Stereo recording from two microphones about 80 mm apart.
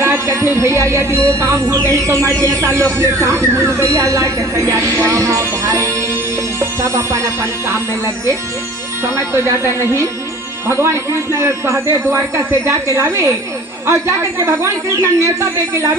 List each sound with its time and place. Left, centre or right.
0.0 s a man's voice: right
6.6 s music: right
7.7 s a man's voice: right